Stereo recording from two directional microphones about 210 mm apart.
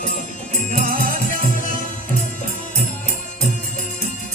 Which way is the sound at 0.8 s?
40° right (ahead or behind).